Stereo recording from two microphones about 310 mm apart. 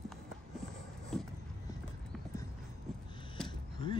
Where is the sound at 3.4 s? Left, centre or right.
Centre.